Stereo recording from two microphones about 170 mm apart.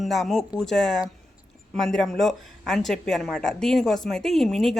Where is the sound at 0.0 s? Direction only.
Centre (ahead or behind).